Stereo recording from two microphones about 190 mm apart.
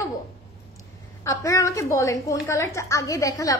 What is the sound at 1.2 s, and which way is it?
A woman's voice, 15° left (ahead or behind).